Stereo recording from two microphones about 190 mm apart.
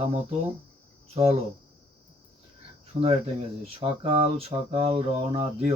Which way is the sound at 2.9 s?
30° right (ahead or behind).